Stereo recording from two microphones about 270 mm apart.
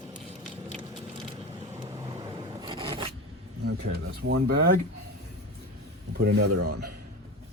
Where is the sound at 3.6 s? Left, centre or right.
Right.